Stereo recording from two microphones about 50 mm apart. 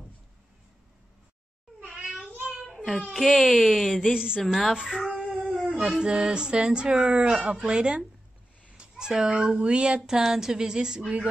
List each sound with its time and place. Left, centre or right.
2.7 s a sound: centre
3.2 s speech: centre
4.1 s speech: centre
4.4 s speech: centre
4.7 s speech: centre
8.6 s a sound: centre
9.3 s speech: right